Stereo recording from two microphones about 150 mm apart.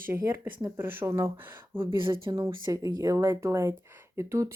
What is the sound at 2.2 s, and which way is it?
Speech, 25° right (ahead or behind).